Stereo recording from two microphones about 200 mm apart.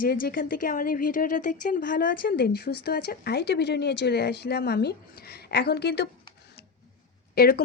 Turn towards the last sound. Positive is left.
turn(degrees=50)  # may be behind; listen again after turning